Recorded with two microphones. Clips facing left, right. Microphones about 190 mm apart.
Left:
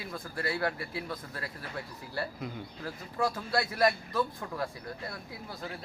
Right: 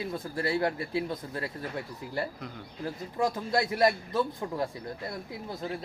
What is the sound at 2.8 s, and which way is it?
Speech, 20° right (ahead or behind).